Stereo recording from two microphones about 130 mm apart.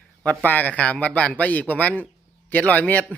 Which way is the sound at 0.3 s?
10° left (ahead or behind).